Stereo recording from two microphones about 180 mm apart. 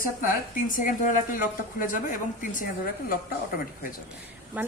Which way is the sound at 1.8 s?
50° left (ahead or behind).